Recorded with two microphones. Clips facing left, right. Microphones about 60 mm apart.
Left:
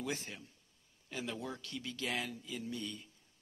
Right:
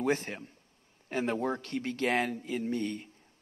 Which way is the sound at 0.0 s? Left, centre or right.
Right.